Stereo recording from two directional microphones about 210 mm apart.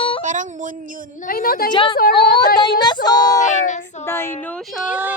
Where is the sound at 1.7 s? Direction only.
25° left (ahead or behind).